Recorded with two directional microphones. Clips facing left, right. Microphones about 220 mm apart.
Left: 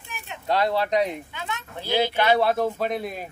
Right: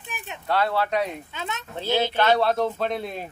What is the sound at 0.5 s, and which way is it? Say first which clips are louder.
Speech: left 1 dB; 15° left (ahead or behind).